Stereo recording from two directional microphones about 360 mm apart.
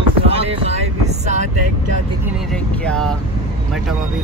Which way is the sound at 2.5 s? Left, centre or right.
Centre.